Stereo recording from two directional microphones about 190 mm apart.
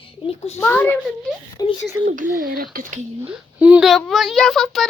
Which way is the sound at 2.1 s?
45° right (ahead or behind).